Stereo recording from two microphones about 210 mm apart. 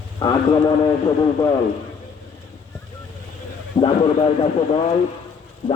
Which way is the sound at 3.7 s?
25° left (ahead or behind).